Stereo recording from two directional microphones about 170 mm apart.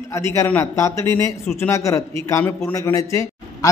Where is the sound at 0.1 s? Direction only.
15° left (ahead or behind).